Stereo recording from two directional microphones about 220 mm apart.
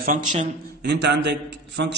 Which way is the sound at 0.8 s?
50° right (ahead or behind).